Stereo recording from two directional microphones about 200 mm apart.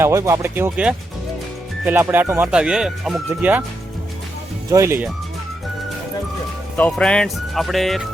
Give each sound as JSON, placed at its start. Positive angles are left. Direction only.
{"t": 0.0, "sound": "speech", "side_deg": -15}
{"t": 4.7, "sound": "speech", "side_deg": -15}
{"t": 6.7, "sound": "speech", "side_deg": 5}